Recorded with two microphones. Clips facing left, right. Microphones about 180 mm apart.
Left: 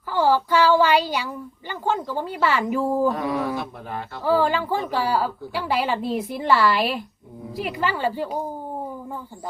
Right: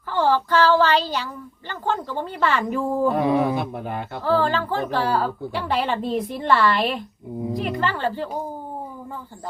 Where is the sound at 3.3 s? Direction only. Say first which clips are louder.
Right 5 dB; 20° right (ahead or behind).